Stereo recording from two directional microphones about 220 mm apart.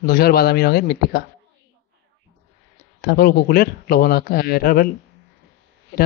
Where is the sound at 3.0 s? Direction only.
45° left (ahead or behind).